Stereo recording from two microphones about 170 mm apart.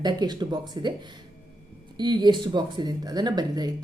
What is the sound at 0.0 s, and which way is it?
Speech, 25° right (ahead or behind).